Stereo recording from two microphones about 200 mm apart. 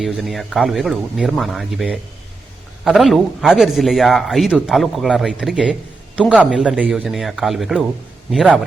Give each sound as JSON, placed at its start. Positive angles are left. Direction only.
{"t": 0.0, "sound": "a man's voice", "side_deg": 0}